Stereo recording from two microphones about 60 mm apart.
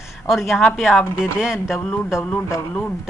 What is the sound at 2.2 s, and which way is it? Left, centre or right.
Speech, left.